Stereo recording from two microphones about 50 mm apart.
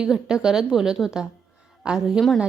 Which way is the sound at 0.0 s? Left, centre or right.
Centre.